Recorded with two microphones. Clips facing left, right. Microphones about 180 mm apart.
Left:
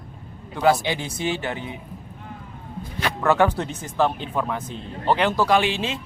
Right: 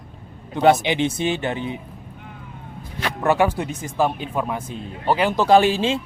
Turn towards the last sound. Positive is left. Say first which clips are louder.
# right 6 dB
turn(degrees=-30)  # may be behind; listen again after turning